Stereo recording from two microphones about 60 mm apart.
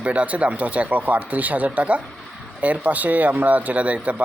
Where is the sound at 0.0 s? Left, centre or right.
Right.